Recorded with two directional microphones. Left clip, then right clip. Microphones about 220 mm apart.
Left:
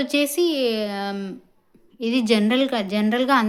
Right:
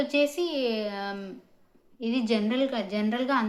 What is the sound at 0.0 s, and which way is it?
A woman's voice, 45° left (ahead or behind).